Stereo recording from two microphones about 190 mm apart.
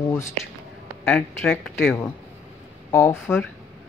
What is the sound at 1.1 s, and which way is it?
Speech, 5° left (ahead or behind).